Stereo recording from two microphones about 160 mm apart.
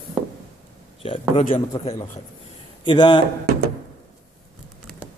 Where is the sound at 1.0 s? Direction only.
35° left (ahead or behind).